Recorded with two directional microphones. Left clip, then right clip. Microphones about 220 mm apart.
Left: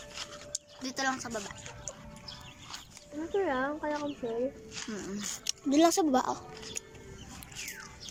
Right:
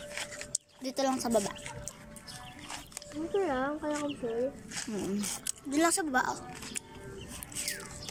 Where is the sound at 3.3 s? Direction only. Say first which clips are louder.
Even; centre (ahead or behind).